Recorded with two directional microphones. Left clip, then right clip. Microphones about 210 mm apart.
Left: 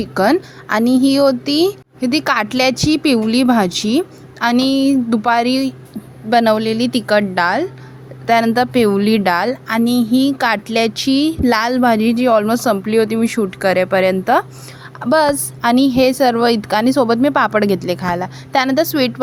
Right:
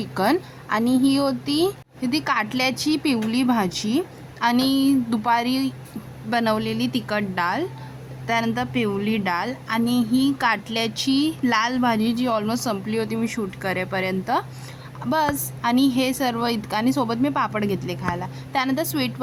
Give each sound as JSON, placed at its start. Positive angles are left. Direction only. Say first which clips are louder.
{"t": 0.0, "sound": "a woman's voice", "louder": "left 7 dB", "side_deg": 15}